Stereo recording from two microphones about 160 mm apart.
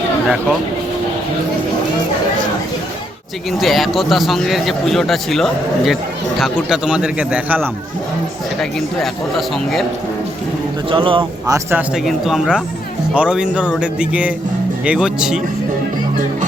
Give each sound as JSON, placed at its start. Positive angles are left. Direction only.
{"t": 3.6, "sound": "a man's voice", "side_deg": 0}
{"t": 9.0, "sound": "a man's voice", "side_deg": 0}
{"t": 10.8, "sound": "speech", "side_deg": -35}
{"t": 11.4, "sound": "speech", "side_deg": -15}
{"t": 12.0, "sound": "a man's voice", "side_deg": 0}